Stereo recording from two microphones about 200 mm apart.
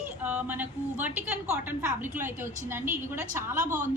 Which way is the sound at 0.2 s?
10° right (ahead or behind).